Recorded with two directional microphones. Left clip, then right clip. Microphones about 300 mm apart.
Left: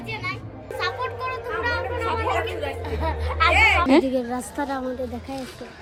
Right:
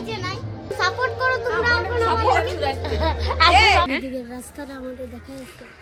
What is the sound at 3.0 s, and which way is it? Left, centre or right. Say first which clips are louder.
Speech: right 4 dB; right.